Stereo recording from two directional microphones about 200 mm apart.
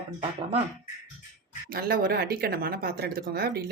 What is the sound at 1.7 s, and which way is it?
Speech, 50° right (ahead or behind).